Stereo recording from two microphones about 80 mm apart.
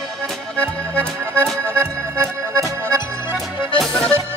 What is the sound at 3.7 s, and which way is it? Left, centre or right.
Accordion, centre.